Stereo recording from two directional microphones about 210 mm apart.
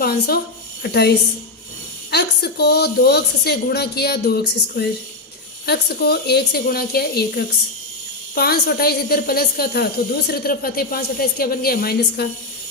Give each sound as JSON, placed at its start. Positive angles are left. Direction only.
{"t": 0.0, "sound": "a woman's voice", "side_deg": 45}